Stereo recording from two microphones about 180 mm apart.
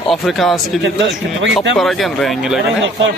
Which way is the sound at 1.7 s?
Centre (ahead or behind).